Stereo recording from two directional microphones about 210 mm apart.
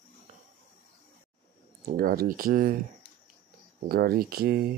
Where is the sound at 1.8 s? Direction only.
45° right (ahead or behind).